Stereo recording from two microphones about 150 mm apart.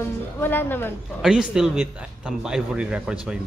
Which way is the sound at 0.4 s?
15° left (ahead or behind).